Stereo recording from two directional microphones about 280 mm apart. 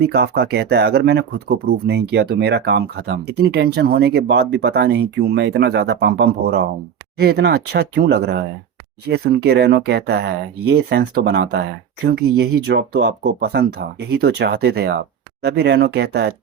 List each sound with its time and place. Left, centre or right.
0.0 s speech: right